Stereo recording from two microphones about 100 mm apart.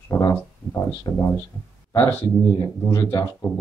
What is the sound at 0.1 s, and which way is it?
Speech, 35° left (ahead or behind).